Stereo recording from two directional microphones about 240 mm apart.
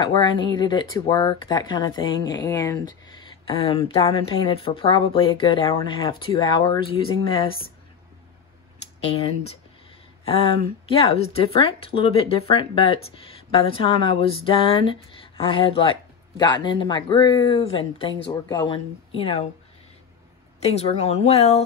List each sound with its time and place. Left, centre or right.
0.0 s speech: centre
10.2 s speech: left
20.6 s speech: left